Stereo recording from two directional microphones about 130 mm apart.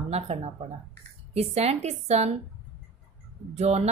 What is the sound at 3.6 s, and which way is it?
Speech, 55° right (ahead or behind).